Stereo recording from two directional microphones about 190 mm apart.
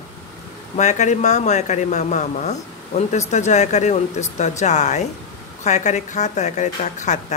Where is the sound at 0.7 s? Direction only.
40° left (ahead or behind).